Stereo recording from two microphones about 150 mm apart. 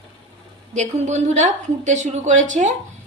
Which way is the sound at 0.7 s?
50° right (ahead or behind).